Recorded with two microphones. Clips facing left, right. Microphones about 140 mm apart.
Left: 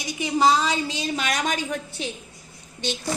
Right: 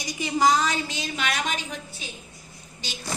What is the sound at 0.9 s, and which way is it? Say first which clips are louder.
Speech: left 3 dB; 35° left (ahead or behind).